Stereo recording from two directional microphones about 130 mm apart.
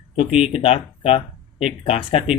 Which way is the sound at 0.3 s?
50° left (ahead or behind).